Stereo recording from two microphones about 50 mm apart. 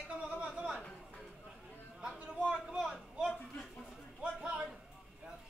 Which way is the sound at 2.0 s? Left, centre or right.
Centre.